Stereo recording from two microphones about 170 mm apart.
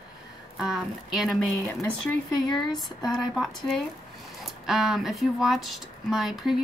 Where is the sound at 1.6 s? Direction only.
10° left (ahead or behind).